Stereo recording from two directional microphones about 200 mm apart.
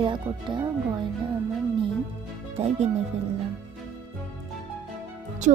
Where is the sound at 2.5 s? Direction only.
30° right (ahead or behind).